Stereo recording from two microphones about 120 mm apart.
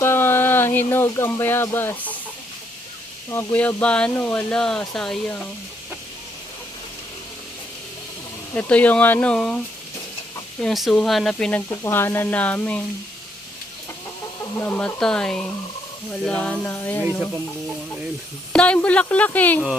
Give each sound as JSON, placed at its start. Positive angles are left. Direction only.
{"t": 0.0, "sound": "a sound", "side_deg": 20}
{"t": 3.2, "sound": "speech", "side_deg": 15}
{"t": 8.5, "sound": "speech", "side_deg": 15}
{"t": 10.6, "sound": "speech", "side_deg": 0}
{"t": 11.7, "sound": "speech", "side_deg": 20}
{"t": 14.5, "sound": "speech", "side_deg": 15}
{"t": 18.5, "sound": "speech", "side_deg": 10}